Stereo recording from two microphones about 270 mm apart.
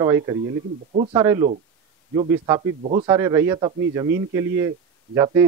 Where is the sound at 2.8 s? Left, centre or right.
Right.